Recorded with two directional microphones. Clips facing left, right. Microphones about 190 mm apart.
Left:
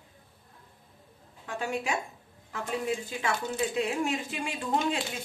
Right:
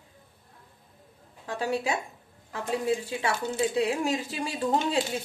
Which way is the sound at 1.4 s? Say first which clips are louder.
Right 3 dB; 35° right (ahead or behind).